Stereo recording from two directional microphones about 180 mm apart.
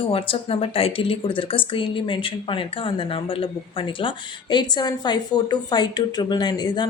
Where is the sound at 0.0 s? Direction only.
30° left (ahead or behind).